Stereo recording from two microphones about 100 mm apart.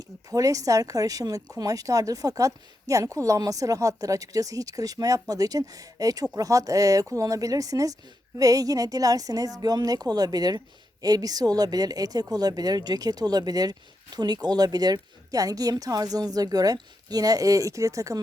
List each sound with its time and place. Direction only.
0.3 s a woman's voice: 35° right (ahead or behind)